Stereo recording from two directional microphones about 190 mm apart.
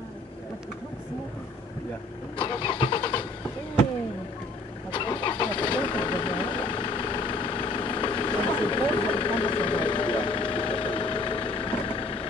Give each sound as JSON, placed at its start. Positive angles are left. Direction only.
{"t": 2.3, "sound": "vehicle", "side_deg": 25}
{"t": 4.9, "sound": "vehicle", "side_deg": 25}